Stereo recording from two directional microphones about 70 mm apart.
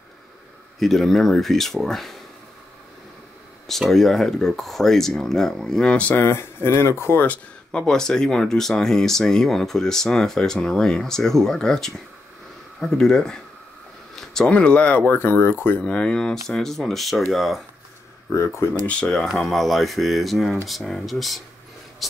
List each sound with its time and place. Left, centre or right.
0.7 s speech: centre
3.6 s speech: centre
6.2 s speech: left
7.2 s speech: centre
14.1 s a sound: centre
14.5 s speech: centre
15.0 s speech: left
15.9 s speech: centre
18.3 s speech: left
18.9 s speech: centre